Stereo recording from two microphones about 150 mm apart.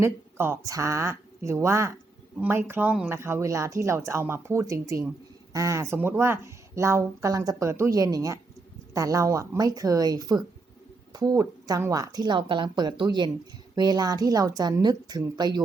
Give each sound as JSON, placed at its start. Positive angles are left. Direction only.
{"t": 0.0, "sound": "speech", "side_deg": -15}